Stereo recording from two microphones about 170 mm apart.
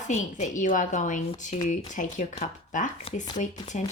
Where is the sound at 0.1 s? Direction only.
45° left (ahead or behind).